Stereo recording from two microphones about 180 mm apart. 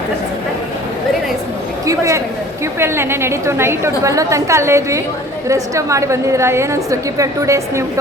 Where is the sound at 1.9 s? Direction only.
15° right (ahead or behind).